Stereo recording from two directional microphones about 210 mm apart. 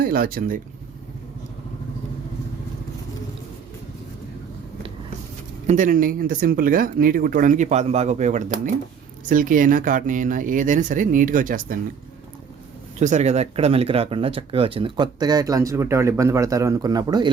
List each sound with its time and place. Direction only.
0.0 s speech: 45° right (ahead or behind)
5.6 s speech: 35° right (ahead or behind)
13.0 s speech: 35° right (ahead or behind)